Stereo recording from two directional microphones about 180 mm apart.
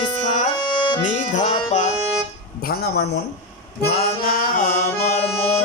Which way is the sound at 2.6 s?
60° left (ahead or behind).